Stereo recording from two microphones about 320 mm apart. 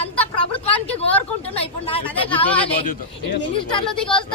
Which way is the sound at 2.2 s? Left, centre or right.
Centre.